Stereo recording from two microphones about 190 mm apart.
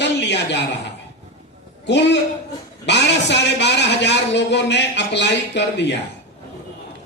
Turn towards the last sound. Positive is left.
turn(degrees=65)  # may be behind; listen again after turning